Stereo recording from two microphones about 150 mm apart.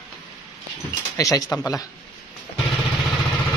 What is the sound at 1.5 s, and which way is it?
Speech, 20° left (ahead or behind).